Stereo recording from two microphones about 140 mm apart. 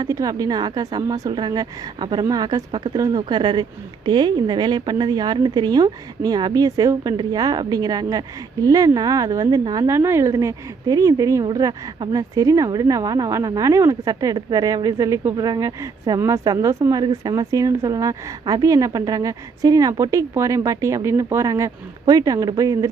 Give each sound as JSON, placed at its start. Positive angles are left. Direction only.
{"t": 0.0, "sound": "speech", "side_deg": -25}